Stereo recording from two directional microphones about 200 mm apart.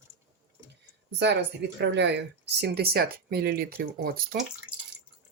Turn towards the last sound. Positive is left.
turn(degrees=-50)  # may be behind; listen again after turning